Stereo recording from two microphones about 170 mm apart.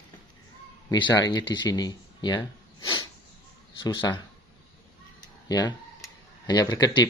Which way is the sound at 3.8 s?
25° left (ahead or behind).